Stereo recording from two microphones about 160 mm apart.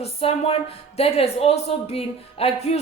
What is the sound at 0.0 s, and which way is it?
Speech, 40° left (ahead or behind).